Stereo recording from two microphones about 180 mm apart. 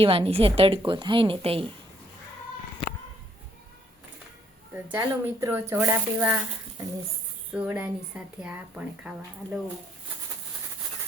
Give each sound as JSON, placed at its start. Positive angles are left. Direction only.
{"t": 0.0, "sound": "a woman's voice", "side_deg": -30}
{"t": 2.8, "sound": "a sound", "side_deg": 70}
{"t": 4.7, "sound": "speech", "side_deg": -15}